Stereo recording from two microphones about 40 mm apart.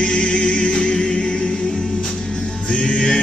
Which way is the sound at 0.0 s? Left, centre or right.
Left.